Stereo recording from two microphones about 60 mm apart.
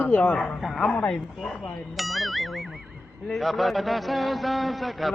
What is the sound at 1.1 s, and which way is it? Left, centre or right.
A man's voice, centre.